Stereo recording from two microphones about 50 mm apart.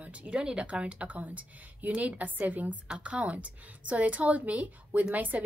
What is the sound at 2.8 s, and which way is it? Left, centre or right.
A woman's voice, centre.